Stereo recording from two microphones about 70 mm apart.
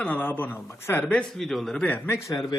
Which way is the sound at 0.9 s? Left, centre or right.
Left.